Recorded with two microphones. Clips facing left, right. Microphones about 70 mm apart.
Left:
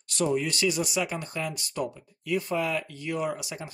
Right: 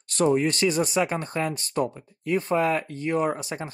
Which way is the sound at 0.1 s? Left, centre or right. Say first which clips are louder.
Right 5 dB; right.